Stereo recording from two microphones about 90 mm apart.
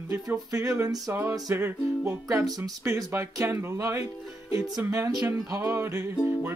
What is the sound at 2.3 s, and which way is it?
Music, 35° right (ahead or behind).